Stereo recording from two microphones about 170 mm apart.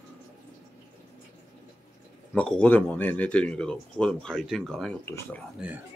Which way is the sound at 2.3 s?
5° left (ahead or behind).